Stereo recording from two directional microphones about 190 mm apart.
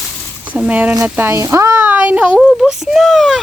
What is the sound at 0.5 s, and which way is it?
Speech, 10° right (ahead or behind).